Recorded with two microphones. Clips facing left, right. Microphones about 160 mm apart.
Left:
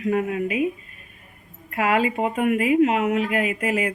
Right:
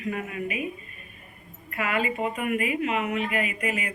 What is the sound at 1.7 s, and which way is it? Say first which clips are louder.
Speech: left 6 dB; 90° left.